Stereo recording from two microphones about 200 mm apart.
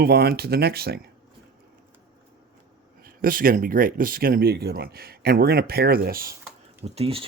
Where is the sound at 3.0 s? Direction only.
45° right (ahead or behind).